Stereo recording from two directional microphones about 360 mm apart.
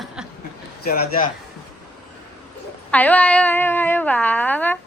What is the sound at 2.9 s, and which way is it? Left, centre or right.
Speech, centre.